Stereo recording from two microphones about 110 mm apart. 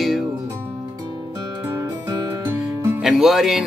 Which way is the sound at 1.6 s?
20° right (ahead or behind).